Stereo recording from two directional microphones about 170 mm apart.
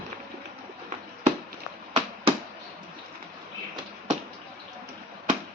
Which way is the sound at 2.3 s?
35° right (ahead or behind).